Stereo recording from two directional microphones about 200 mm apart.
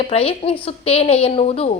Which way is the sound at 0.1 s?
30° left (ahead or behind).